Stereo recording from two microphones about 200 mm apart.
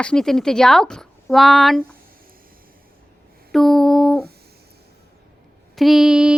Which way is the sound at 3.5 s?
Centre (ahead or behind).